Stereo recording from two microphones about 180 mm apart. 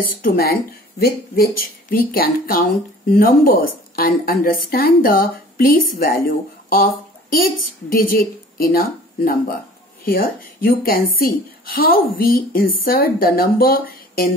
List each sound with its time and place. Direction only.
0.0 s a woman's voice: 55° left (ahead or behind)